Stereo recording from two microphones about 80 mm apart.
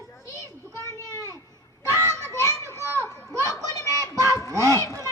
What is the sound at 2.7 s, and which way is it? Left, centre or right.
Children playing, right.